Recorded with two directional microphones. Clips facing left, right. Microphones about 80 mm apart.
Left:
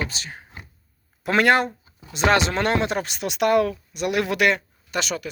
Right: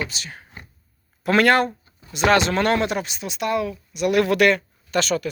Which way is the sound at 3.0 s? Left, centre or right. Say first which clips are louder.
Left 4 dB; left.